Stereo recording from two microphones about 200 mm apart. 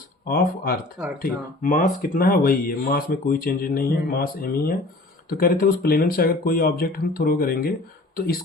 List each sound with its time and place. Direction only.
0.3 s speech: 50° left (ahead or behind)